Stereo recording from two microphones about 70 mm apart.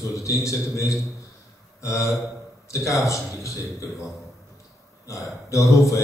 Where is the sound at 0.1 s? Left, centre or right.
Left.